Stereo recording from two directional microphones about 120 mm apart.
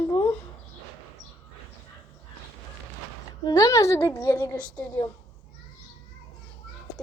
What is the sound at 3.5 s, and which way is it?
A woman's voice, 25° left (ahead or behind).